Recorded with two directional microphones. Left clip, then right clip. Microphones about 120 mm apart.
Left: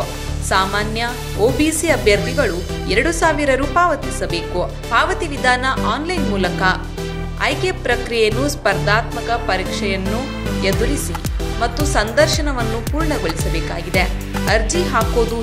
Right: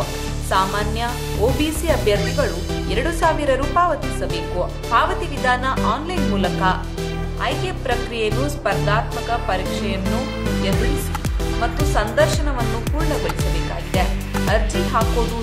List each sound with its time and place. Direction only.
0.5 s speech: 20° left (ahead or behind)
11.6 s speech: 20° left (ahead or behind)
14.4 s speech: 30° left (ahead or behind)